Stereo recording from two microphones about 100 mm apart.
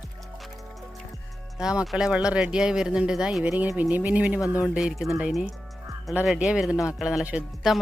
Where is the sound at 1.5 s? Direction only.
5° right (ahead or behind).